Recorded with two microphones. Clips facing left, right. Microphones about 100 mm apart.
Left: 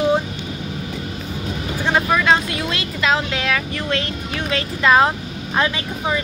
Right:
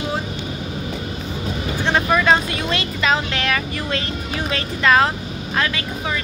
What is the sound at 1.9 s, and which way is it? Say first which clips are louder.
Speech: even; centre (ahead or behind).